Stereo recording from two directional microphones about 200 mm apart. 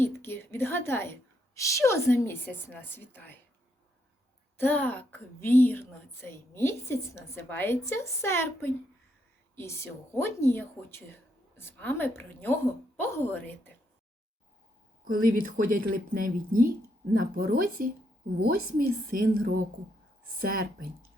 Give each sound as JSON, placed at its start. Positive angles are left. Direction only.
{"t": 0.0, "sound": "a woman's voice", "side_deg": 10}
{"t": 4.5, "sound": "a woman's voice", "side_deg": 10}
{"t": 15.0, "sound": "speech", "side_deg": -45}